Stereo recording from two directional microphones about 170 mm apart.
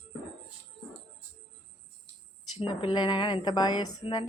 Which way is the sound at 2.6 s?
30° left (ahead or behind).